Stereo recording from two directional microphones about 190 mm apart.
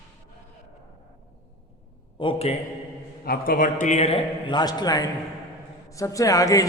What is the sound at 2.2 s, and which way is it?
Speech, 35° left (ahead or behind).